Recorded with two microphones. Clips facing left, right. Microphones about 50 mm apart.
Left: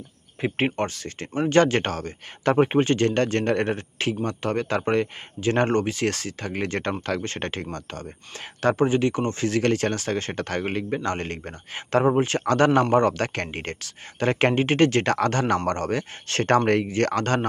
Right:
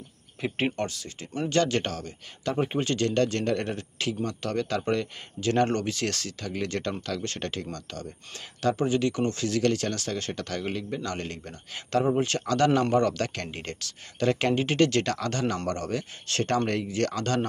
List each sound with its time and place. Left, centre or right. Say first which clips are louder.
0.4 s speech: left 4 dB; left
1.3 s speech: left 6 dB; left
2.8 s speech: left 4 dB; left
15.1 s speech: left 7 dB; left